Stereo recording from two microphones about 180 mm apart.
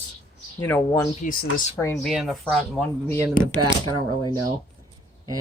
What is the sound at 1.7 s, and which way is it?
Speech, 15° left (ahead or behind).